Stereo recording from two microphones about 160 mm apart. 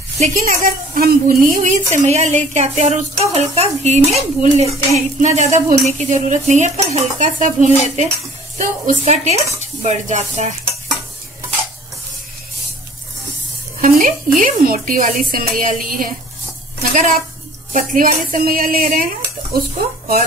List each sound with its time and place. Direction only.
0.2 s a woman's voice: 55° right (ahead or behind)
13.7 s a woman's voice: 60° right (ahead or behind)